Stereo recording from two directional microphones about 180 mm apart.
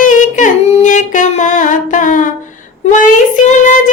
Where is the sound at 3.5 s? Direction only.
45° left (ahead or behind).